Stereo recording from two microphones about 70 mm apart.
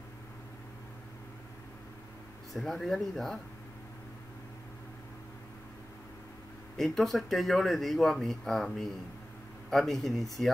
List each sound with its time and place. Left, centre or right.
2.5 s speech: centre
6.8 s speech: centre